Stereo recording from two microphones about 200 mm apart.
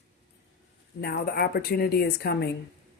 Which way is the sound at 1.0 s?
50° left (ahead or behind).